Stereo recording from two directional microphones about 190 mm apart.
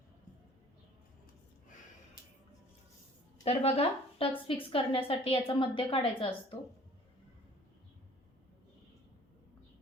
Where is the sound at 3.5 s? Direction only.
35° left (ahead or behind).